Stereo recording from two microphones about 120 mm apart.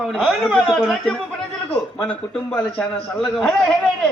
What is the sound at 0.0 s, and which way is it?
A man's voice, 5° right (ahead or behind).